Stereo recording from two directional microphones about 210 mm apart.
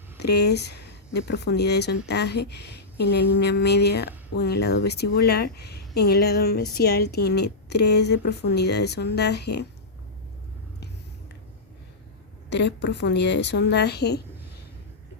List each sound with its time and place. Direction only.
0.2 s speech: 50° left (ahead or behind)
12.5 s a woman's voice: 55° left (ahead or behind)